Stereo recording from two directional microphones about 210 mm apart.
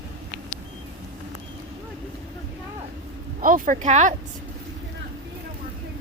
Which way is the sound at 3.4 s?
40° right (ahead or behind).